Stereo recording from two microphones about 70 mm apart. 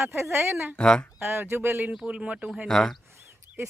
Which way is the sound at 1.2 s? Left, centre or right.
Right.